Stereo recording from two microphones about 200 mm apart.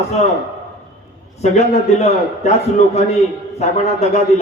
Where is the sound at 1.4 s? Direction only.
35° left (ahead or behind).